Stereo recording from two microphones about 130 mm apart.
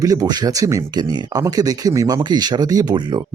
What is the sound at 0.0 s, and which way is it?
Speech, 30° right (ahead or behind).